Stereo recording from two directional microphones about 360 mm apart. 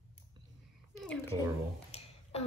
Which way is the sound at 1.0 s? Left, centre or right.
Centre.